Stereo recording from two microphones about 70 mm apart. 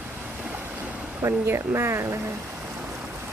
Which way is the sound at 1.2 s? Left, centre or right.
Right.